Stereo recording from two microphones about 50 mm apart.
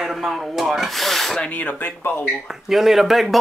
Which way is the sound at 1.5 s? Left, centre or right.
Left.